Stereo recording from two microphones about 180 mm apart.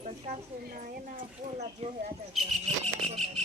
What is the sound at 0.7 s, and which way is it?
Speech, 50° right (ahead or behind).